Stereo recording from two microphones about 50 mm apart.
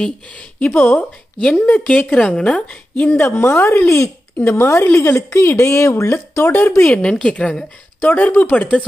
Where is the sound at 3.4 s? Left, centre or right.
Left.